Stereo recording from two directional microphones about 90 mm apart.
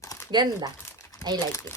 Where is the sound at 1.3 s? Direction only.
50° right (ahead or behind).